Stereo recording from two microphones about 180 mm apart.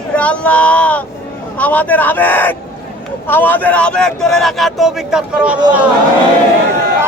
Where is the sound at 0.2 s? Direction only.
5° left (ahead or behind).